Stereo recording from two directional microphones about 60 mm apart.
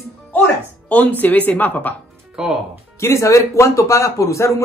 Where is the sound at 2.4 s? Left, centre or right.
Centre.